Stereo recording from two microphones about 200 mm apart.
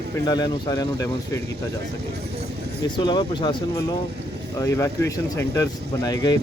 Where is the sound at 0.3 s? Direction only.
20° left (ahead or behind).